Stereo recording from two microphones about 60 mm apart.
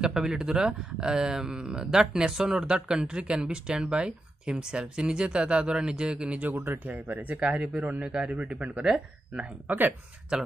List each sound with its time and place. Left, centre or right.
0.0 s speech: centre